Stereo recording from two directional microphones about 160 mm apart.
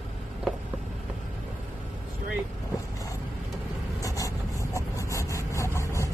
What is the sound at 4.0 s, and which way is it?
Vehicle, 20° left (ahead or behind).